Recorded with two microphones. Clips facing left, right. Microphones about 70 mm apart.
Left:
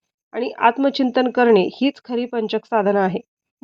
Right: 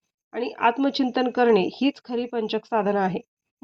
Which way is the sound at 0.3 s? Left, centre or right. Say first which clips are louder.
Left 5 dB; left.